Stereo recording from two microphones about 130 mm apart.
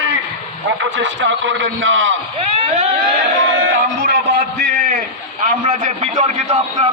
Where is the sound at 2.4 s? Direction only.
50° right (ahead or behind).